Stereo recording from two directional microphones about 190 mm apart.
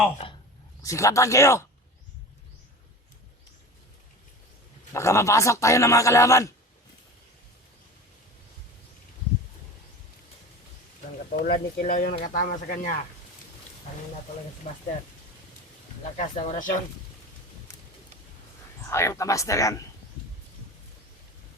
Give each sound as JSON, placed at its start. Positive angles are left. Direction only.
{"t": 0.8, "sound": "a man's voice", "side_deg": 15}
{"t": 4.9, "sound": "a man's voice", "side_deg": 15}
{"t": 11.3, "sound": "speech", "side_deg": 50}
{"t": 16.1, "sound": "speech", "side_deg": 35}
{"t": 18.9, "sound": "a man's voice", "side_deg": 15}